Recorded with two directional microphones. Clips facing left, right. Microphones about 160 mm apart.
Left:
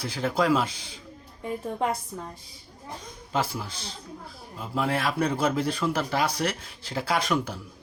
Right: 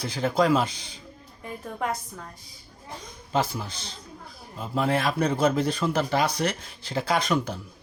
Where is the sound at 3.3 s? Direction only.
5° left (ahead or behind).